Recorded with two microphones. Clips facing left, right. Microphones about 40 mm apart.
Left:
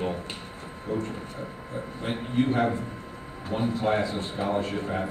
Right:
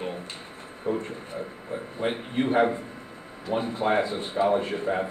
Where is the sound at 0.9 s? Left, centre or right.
Right.